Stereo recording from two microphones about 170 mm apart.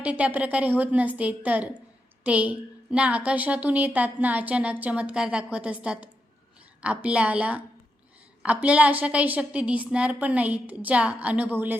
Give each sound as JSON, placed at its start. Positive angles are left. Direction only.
{"t": 0.0, "sound": "a woman's voice", "side_deg": -10}